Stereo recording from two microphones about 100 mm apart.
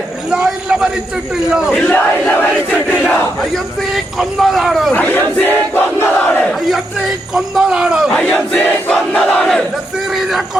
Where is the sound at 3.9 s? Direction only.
Centre (ahead or behind).